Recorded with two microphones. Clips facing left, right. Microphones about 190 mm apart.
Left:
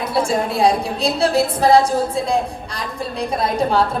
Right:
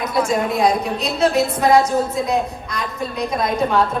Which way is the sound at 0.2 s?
30° left (ahead or behind).